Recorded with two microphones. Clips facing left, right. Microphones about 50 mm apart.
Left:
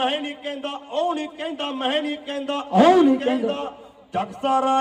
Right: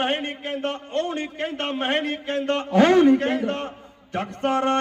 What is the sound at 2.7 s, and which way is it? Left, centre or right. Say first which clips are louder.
A man's voice: left 1 dB; centre.